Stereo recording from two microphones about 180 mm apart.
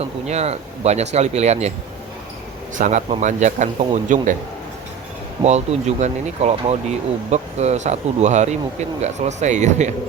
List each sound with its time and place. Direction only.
0.0 s speech: 35° right (ahead or behind)
2.7 s speech: 45° right (ahead or behind)
5.4 s speech: 40° right (ahead or behind)